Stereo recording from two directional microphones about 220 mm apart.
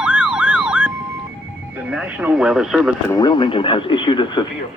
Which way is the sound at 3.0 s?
20° left (ahead or behind).